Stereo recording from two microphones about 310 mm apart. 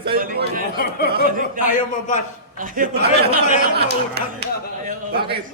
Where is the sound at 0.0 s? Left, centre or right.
Right.